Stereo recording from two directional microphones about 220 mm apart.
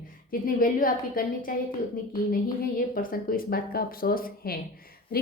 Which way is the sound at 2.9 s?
40° left (ahead or behind).